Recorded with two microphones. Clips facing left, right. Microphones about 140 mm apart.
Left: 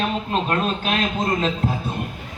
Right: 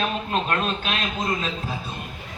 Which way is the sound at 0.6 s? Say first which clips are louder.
Left 4 dB; 45° left (ahead or behind).